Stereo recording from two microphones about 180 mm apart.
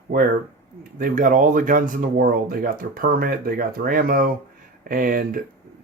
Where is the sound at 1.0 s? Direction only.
50° right (ahead or behind).